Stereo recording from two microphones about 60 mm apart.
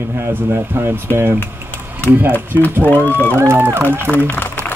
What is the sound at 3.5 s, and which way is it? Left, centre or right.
Speech, right.